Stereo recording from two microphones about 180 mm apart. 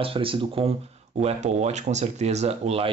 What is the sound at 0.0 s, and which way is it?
Speech, 30° right (ahead or behind).